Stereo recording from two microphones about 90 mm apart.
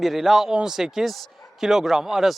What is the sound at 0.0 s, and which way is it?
A man's voice, centre (ahead or behind).